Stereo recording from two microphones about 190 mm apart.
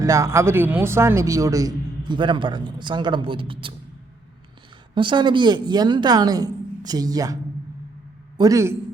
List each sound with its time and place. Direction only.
0.0 s speech: 15° right (ahead or behind)
4.9 s speech: 25° right (ahead or behind)
8.4 s speech: 15° right (ahead or behind)